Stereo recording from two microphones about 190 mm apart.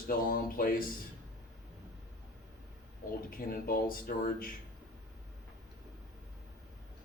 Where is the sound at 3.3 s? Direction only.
50° left (ahead or behind).